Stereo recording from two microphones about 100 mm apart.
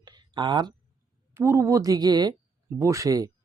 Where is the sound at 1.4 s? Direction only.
30° right (ahead or behind).